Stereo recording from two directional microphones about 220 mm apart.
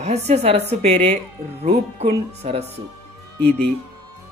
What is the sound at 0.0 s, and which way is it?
A woman's voice, 30° right (ahead or behind).